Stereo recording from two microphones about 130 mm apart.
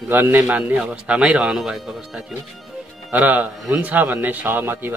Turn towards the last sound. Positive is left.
turn(degrees=-15)  # may be behind; listen again after turning